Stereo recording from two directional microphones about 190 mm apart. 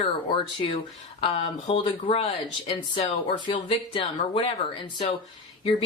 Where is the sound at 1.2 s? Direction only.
25° left (ahead or behind).